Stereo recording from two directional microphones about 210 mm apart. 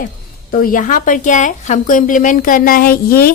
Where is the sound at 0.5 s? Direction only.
40° left (ahead or behind).